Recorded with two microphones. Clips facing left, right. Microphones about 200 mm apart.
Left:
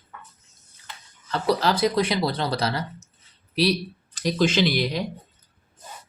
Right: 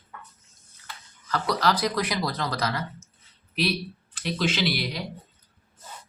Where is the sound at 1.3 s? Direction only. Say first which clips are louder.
Left 3 dB; 25° left (ahead or behind); by 4.8 s 45° left (ahead or behind).